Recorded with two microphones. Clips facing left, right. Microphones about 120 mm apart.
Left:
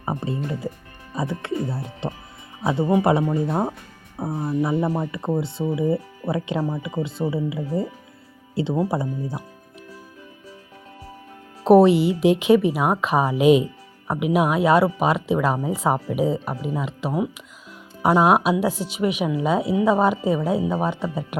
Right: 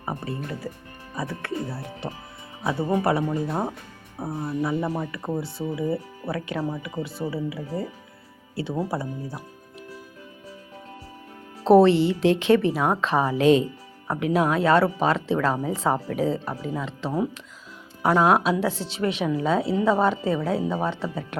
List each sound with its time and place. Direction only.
0.0 s speech: 20° left (ahead or behind)
11.6 s speech: 15° left (ahead or behind)